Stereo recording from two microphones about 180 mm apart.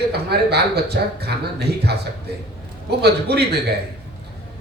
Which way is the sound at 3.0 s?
65° right (ahead or behind).